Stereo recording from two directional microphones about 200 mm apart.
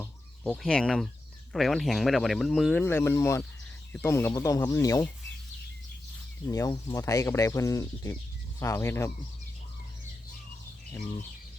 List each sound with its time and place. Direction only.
0.0 s speech: 5° left (ahead or behind)
2.8 s speech: 10° left (ahead or behind)
6.5 s speech: 15° left (ahead or behind)